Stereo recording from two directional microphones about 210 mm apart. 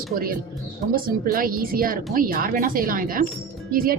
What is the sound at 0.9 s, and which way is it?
A woman's voice, 45° right (ahead or behind).